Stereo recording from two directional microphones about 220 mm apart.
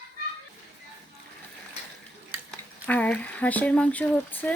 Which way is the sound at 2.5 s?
5° left (ahead or behind).